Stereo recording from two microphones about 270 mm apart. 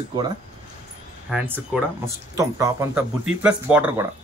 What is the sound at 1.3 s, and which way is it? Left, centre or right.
Speech, centre.